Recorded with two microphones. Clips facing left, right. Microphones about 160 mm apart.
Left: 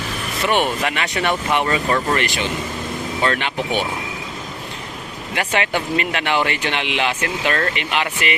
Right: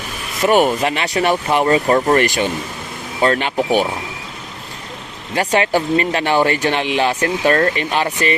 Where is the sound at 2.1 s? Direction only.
45° right (ahead or behind).